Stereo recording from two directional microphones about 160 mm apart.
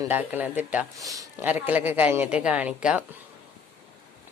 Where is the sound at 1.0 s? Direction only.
20° right (ahead or behind).